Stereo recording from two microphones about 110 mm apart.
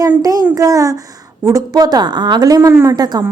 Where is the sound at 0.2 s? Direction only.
35° right (ahead or behind).